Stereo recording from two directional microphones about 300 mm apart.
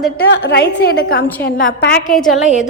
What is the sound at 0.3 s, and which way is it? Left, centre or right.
A woman's voice, left.